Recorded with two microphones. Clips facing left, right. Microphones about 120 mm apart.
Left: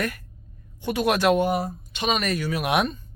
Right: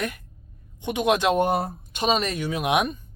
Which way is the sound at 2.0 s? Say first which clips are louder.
Right 1 dB; 30° right (ahead or behind).